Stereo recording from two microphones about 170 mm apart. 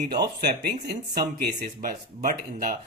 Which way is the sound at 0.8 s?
65° right (ahead or behind).